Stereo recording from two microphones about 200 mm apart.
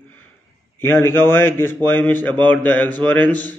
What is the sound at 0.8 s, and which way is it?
A man's voice, 10° left (ahead or behind).